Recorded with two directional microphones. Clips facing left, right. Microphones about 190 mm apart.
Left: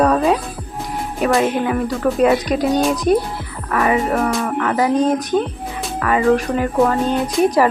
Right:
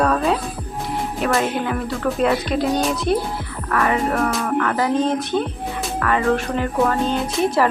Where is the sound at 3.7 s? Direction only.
15° left (ahead or behind).